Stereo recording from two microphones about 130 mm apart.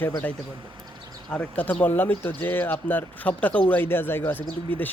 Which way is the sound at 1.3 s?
10° left (ahead or behind).